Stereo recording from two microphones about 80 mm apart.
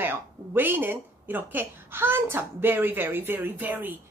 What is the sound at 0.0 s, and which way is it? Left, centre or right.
A woman's voice, right.